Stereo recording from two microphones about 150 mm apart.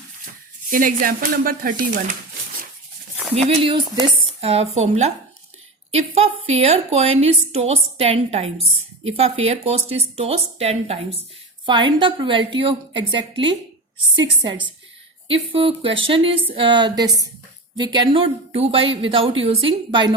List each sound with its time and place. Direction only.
0.7 s speech: 65° right (ahead or behind)
3.3 s a woman's voice: 45° right (ahead or behind)